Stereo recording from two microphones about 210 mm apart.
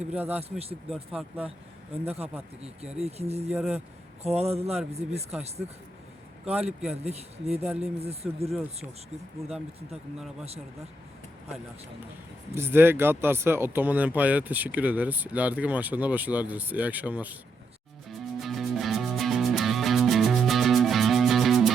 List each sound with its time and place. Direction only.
0.0 s speech: 5° right (ahead or behind)
2.6 s speech: 5° right (ahead or behind)
3.0 s speech: 30° right (ahead or behind)
3.5 s speech: 5° right (ahead or behind)
4.2 s speech: 30° right (ahead or behind)
5.0 s speech: 5° right (ahead or behind)
6.4 s a man's voice: 5° right (ahead or behind)
7.0 s speech: 30° right (ahead or behind)
12.5 s speech: 10° right (ahead or behind)
18.3 s music: centre (ahead or behind)